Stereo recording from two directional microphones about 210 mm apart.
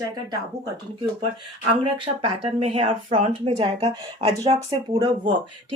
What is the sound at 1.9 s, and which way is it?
Speech, 25° right (ahead or behind).